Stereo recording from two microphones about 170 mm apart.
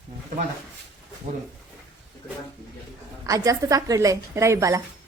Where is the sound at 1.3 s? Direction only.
45° right (ahead or behind).